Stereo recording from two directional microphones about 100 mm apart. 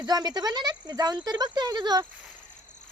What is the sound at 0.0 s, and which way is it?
Speech, 40° right (ahead or behind).